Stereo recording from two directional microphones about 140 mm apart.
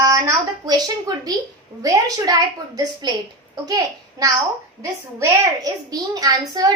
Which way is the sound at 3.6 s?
25° right (ahead or behind).